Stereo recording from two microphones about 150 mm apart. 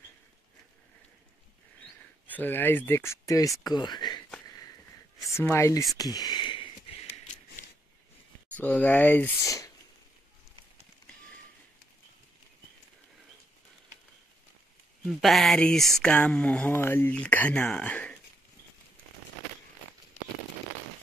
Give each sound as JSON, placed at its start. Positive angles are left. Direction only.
{"t": 2.2, "sound": "speech", "side_deg": 10}
{"t": 5.3, "sound": "speech", "side_deg": 15}
{"t": 5.9, "sound": "a sound", "side_deg": 25}
{"t": 8.5, "sound": "speech", "side_deg": 10}
{"t": 15.0, "sound": "speech", "side_deg": 0}